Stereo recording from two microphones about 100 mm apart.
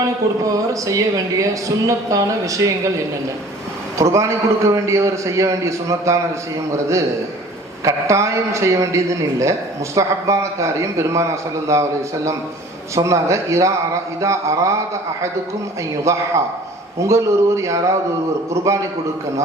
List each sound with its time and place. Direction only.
0.0 s a man's voice: 35° right (ahead or behind)
3.9 s a man's voice: 30° right (ahead or behind)
16.1 s a man's voice: 30° right (ahead or behind)